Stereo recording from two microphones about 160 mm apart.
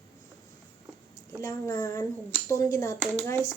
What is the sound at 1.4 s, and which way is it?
A woman's voice, 20° left (ahead or behind).